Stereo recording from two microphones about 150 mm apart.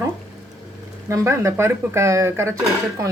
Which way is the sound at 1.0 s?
20° right (ahead or behind).